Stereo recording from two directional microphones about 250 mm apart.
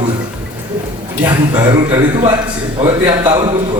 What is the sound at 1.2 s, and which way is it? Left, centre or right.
A man's voice, centre.